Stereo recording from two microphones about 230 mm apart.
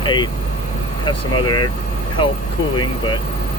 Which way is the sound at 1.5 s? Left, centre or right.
Centre.